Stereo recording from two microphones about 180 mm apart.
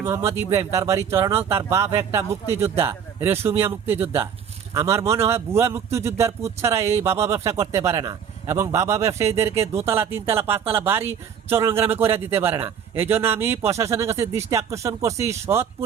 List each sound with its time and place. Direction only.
0.0 s speech: 15° right (ahead or behind)